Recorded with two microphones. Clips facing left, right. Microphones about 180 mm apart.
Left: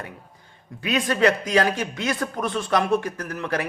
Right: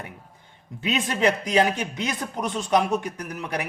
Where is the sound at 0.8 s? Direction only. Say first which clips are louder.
Left 3 dB; 20° right (ahead or behind).